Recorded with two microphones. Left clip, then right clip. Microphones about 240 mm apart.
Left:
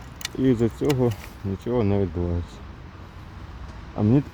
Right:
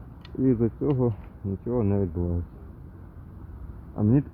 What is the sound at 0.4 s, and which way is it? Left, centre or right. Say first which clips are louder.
Speech: left 3 dB; centre.